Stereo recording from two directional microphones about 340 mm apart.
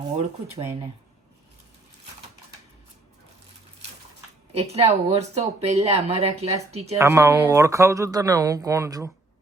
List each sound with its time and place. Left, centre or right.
4.5 s speech: centre